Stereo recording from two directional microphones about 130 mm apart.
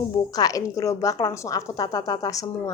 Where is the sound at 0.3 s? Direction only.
25° left (ahead or behind).